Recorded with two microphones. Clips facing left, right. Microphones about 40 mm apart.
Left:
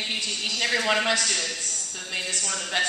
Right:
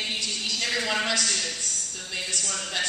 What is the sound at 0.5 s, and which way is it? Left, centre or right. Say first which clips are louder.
A woman's voice: left 4 dB; left.